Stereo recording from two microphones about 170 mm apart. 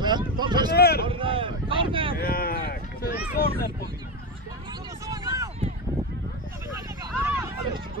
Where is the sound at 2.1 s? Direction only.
60° left (ahead or behind).